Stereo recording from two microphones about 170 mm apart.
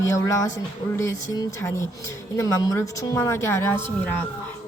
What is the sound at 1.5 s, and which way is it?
Speech, 15° left (ahead or behind).